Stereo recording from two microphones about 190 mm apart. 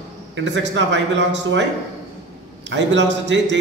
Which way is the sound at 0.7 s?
70° right (ahead or behind).